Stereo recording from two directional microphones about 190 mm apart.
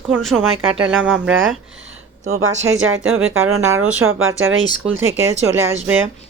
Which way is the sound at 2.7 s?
90° right.